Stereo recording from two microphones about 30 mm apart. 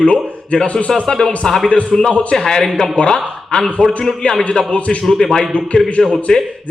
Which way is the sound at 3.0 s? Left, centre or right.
Left.